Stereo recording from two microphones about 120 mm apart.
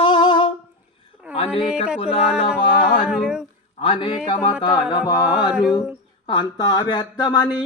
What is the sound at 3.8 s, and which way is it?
Speech, 45° left (ahead or behind).